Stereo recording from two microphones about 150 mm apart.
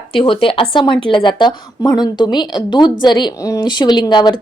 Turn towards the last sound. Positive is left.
turn(degrees=30)  # may be behind; listen again after turning